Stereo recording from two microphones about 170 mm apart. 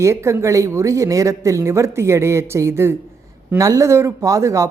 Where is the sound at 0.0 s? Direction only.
15° right (ahead or behind).